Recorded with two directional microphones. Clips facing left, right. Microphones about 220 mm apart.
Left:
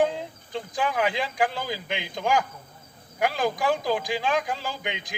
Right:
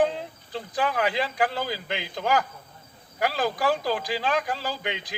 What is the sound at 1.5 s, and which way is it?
A man's voice, 15° left (ahead or behind).